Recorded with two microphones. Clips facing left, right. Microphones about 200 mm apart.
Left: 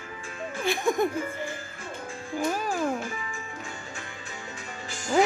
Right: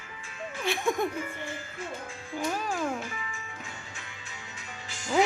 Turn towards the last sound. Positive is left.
turn(degrees=50)  # may be behind; listen again after turning